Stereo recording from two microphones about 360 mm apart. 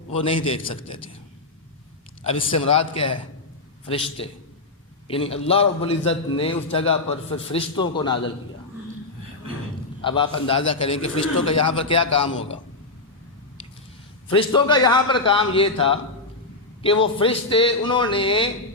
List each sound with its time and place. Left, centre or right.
0.1 s a man's voice: centre
2.2 s a man's voice: centre
10.0 s a man's voice: centre
14.3 s a man's voice: centre